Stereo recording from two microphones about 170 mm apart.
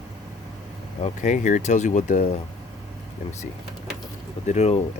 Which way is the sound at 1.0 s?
45° left (ahead or behind).